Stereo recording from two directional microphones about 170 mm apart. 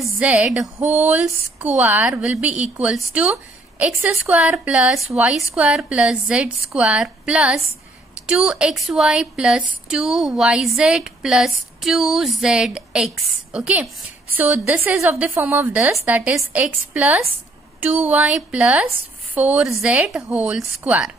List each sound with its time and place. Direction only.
0.0 s a woman's voice: 10° right (ahead or behind)